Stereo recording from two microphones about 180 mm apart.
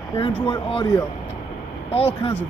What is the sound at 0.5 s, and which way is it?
Speech, 25° left (ahead or behind).